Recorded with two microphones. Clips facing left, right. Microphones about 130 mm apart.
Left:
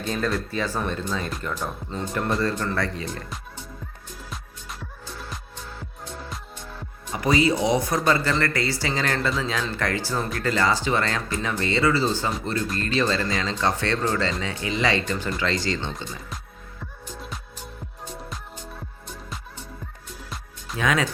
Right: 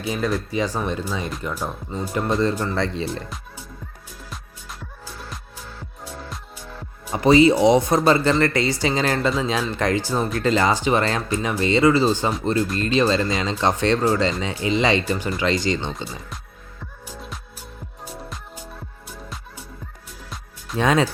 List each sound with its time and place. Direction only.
0.0 s speech: 10° right (ahead or behind); by 3.2 s 25° right (ahead or behind)
3.2 s music: centre (ahead or behind)
7.1 s speech: 25° right (ahead or behind)
17.1 s music: centre (ahead or behind)
20.7 s speech: 30° right (ahead or behind)